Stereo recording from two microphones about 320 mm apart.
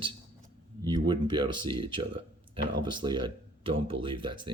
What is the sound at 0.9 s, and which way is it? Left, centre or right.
A man's voice, centre.